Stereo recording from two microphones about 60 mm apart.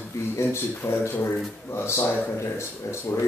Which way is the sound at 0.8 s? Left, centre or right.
Left.